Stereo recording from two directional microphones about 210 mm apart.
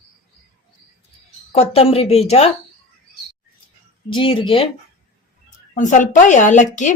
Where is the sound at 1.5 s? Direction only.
30° left (ahead or behind).